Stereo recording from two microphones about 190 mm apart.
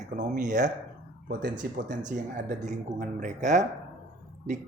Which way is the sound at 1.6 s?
55° right (ahead or behind).